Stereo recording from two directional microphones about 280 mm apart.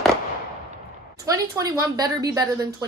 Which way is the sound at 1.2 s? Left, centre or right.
Centre.